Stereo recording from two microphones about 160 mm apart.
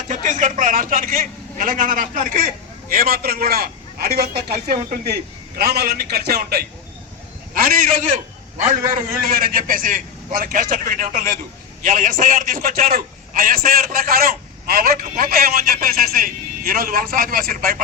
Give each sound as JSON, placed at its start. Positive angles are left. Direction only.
{"t": 0.1, "sound": "a man's voice", "side_deg": -50}
{"t": 2.9, "sound": "a man's voice", "side_deg": -70}
{"t": 7.5, "sound": "a man's voice", "side_deg": -65}
{"t": 9.1, "sound": "a man's voice", "side_deg": -65}